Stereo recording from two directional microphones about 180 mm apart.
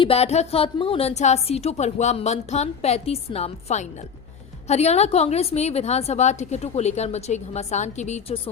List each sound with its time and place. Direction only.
0.0 s a woman's voice: 35° left (ahead or behind)